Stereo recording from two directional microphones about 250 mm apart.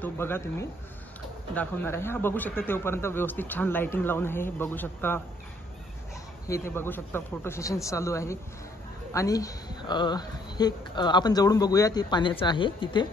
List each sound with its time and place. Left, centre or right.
0.0 s speech: centre
6.4 s speech: centre